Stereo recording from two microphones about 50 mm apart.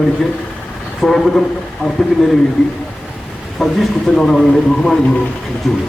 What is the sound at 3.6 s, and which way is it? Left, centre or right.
Speech, centre.